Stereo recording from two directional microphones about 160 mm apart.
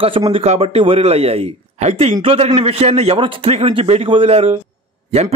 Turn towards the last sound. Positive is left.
turn(degrees=-40)  # may be behind; listen again after turning